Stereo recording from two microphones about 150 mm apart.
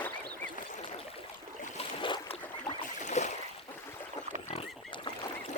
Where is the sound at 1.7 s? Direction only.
35° left (ahead or behind).